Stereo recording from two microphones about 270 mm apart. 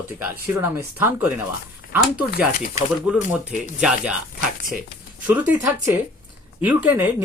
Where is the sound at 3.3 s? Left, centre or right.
Centre.